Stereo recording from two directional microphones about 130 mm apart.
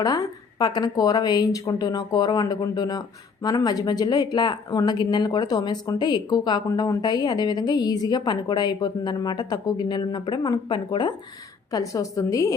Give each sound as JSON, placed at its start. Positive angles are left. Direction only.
{"t": 0.0, "sound": "speech", "side_deg": 30}